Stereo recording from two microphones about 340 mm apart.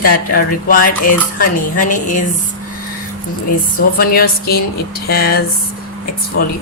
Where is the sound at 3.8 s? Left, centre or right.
Left.